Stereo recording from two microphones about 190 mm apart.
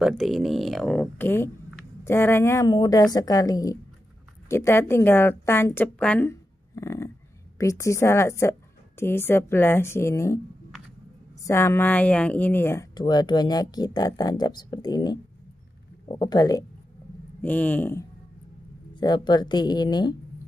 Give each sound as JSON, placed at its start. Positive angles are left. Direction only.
{"t": 0.0, "sound": "a woman's voice", "side_deg": 0}
{"t": 11.4, "sound": "speech", "side_deg": 15}
{"t": 17.4, "sound": "speech", "side_deg": 10}
{"t": 18.9, "sound": "speech", "side_deg": 25}